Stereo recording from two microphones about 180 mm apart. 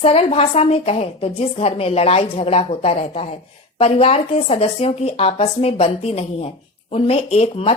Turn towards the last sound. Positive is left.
turn(degrees=35)  # may be behind; listen again after turning